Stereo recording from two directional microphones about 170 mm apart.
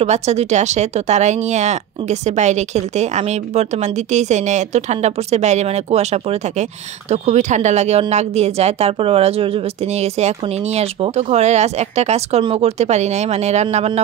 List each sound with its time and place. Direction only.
0.0 s a woman's voice: 40° right (ahead or behind)